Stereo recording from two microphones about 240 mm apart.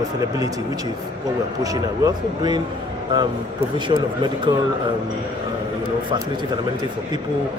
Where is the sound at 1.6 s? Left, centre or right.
Centre.